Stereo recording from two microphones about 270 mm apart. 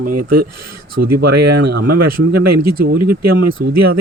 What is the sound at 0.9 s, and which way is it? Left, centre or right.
Speech, right.